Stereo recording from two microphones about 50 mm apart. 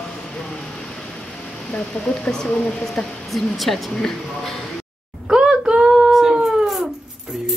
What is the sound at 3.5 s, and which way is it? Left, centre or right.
Speech, centre.